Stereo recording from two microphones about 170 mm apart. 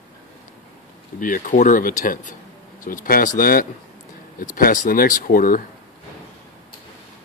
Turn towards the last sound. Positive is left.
turn(degrees=55)  # may be behind; listen again after turning